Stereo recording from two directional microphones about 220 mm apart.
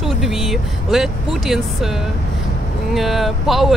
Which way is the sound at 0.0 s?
Centre (ahead or behind).